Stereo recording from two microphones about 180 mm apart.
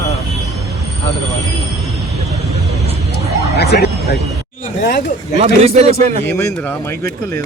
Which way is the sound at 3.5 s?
65° left (ahead or behind).